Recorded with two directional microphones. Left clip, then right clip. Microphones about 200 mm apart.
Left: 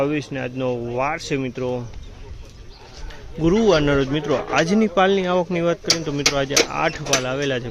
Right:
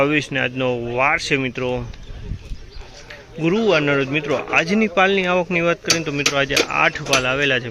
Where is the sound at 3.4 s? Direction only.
20° left (ahead or behind).